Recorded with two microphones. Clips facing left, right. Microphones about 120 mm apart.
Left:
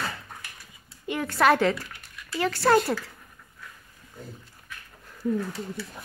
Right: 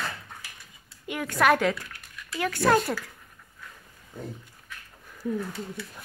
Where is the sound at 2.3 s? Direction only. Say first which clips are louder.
Left 2 dB; 5° left (ahead or behind).